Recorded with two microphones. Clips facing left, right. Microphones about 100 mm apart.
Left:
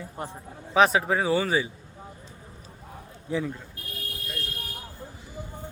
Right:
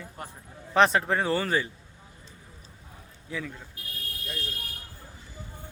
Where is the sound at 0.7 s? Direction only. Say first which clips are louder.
Left 1 dB; 5° left (ahead or behind).